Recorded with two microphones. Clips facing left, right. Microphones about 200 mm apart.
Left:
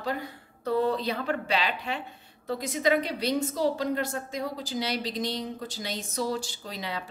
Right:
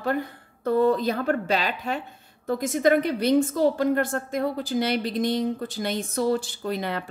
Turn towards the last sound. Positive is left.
turn(degrees=-55)  # may be behind; listen again after turning